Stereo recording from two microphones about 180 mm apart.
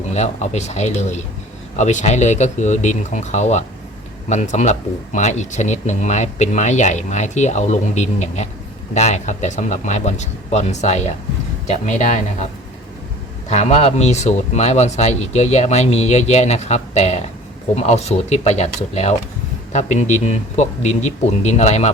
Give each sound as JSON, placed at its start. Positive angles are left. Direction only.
{"t": 0.1, "sound": "speech", "side_deg": 40}
{"t": 13.5, "sound": "speech", "side_deg": 35}